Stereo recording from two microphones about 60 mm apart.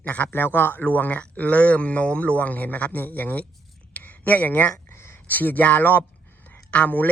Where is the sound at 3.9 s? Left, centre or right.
Left.